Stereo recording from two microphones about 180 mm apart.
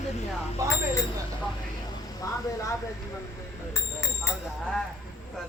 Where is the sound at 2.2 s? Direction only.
20° left (ahead or behind).